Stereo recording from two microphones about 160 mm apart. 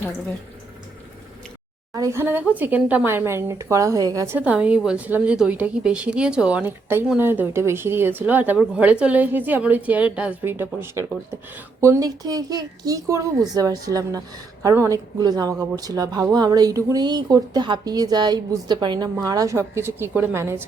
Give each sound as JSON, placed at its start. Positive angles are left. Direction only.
{"t": 1.9, "sound": "speech", "side_deg": -15}
{"t": 4.4, "sound": "a woman's voice", "side_deg": -10}